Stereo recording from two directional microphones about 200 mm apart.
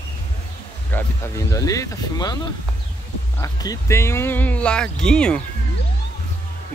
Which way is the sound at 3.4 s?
15° left (ahead or behind).